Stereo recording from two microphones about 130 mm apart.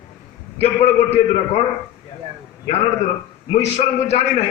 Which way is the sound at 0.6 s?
55° left (ahead or behind).